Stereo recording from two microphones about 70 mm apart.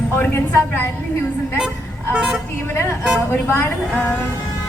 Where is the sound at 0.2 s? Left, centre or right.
Left.